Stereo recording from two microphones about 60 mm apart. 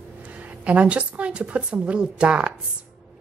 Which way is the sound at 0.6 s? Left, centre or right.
Right.